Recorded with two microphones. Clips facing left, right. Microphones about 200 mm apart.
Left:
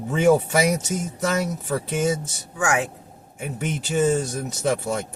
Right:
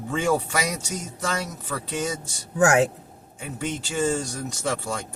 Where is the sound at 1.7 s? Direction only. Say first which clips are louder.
Left 5 dB; 20° left (ahead or behind).